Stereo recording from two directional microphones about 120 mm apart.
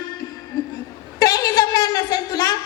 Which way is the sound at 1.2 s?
30° left (ahead or behind).